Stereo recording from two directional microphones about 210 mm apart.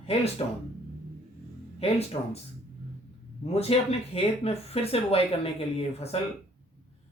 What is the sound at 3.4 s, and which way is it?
Speech, 30° left (ahead or behind).